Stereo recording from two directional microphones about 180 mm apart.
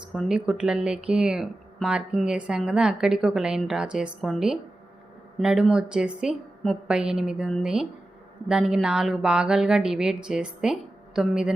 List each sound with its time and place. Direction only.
0.1 s speech: centre (ahead or behind)